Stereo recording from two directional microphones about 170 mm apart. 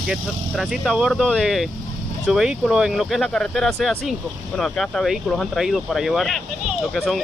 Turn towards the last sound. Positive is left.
turn(degrees=0)  # may be behind; listen again after turning